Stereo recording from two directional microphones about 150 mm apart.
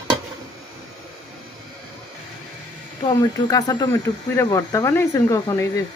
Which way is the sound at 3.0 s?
25° left (ahead or behind).